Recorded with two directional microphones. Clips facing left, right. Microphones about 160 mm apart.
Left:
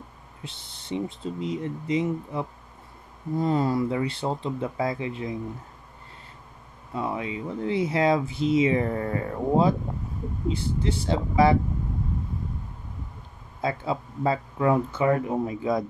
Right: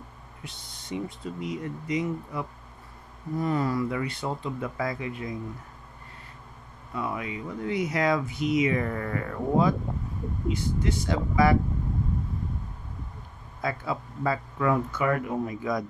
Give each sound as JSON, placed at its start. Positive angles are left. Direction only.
{"t": 0.4, "sound": "speech", "side_deg": 25}
{"t": 6.9, "sound": "speech", "side_deg": 25}
{"t": 13.6, "sound": "speech", "side_deg": 25}